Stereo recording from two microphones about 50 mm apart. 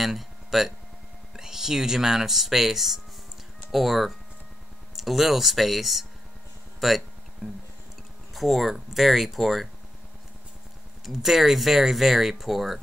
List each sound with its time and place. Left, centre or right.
0.0 s speech: centre
7.4 s music: right
8.4 s speech: centre
11.1 s speech: centre